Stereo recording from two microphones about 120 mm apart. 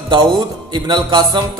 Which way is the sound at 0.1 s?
40° right (ahead or behind).